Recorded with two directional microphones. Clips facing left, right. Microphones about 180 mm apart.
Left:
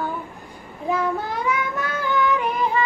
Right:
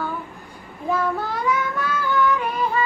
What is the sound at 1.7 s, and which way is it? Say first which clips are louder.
Child singing: right 1 dB; 20° left (ahead or behind).